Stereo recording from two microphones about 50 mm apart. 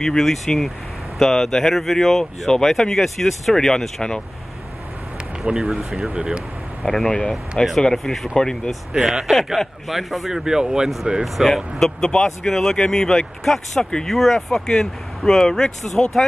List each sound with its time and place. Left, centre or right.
0.0 s speech: centre
5.4 s a man's voice: centre
6.8 s speech: centre
8.9 s a man's voice: centre
12.0 s speech: centre